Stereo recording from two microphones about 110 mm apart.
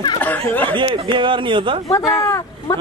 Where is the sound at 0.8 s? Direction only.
50° right (ahead or behind).